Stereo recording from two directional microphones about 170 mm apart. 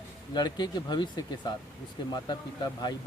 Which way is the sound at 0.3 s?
25° left (ahead or behind).